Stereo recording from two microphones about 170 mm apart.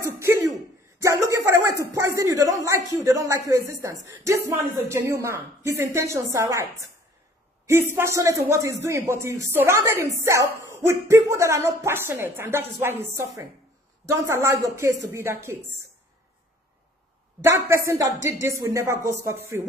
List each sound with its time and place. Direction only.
0.0 s throat clearing: 15° right (ahead or behind)
1.0 s a sound: 15° right (ahead or behind)
4.1 s speech: 15° right (ahead or behind)
7.6 s speech: 15° right (ahead or behind)
17.4 s speech: 15° right (ahead or behind)